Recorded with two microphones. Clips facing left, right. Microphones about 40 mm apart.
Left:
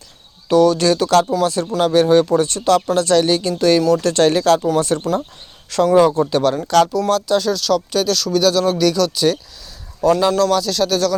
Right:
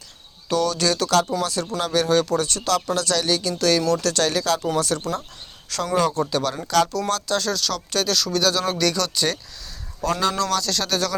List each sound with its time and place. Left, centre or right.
0.4 s speech: centre